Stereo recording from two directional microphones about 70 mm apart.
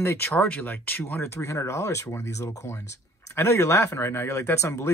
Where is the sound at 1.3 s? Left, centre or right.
Left.